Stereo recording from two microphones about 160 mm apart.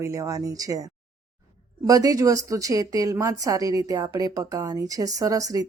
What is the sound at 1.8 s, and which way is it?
Speech, 20° right (ahead or behind).